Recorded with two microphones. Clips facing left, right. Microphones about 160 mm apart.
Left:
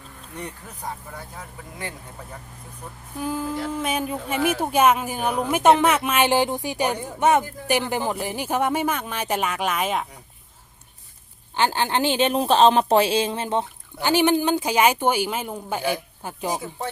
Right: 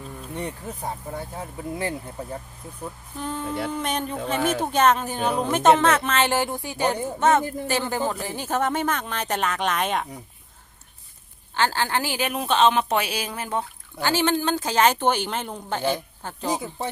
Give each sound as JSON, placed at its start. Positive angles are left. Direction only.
{"t": 0.3, "sound": "speech", "side_deg": -25}
{"t": 3.2, "sound": "speech", "side_deg": 5}
{"t": 11.5, "sound": "speech", "side_deg": 20}